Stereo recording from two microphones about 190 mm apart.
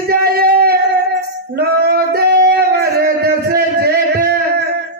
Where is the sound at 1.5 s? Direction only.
55° right (ahead or behind).